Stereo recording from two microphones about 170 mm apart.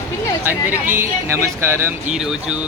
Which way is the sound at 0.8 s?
15° right (ahead or behind).